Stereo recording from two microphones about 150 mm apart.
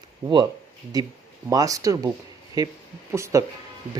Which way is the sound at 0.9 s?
25° right (ahead or behind).